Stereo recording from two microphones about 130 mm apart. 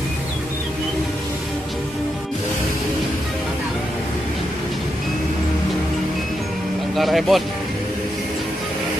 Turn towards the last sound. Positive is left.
turn(degrees=0)  # may be behind; listen again after turning